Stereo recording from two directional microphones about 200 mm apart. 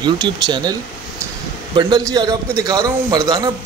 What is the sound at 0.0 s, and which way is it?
Speech, 20° right (ahead or behind).